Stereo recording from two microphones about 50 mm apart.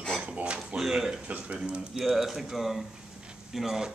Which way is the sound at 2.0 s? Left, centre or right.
Centre.